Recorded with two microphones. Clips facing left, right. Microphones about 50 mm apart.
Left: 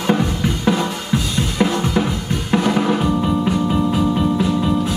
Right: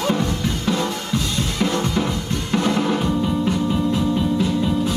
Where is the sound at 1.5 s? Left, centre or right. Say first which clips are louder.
Left 4 dB; centre.